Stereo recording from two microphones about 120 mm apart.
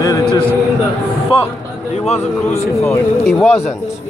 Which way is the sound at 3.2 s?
Centre (ahead or behind).